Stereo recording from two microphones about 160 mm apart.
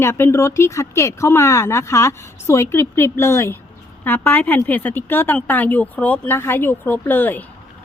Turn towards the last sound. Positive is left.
turn(degrees=10)  # may be behind; listen again after turning